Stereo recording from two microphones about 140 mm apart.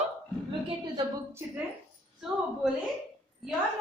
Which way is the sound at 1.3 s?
15° right (ahead or behind).